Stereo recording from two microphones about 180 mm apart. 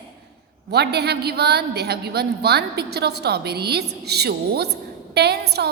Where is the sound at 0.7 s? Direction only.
65° right (ahead or behind).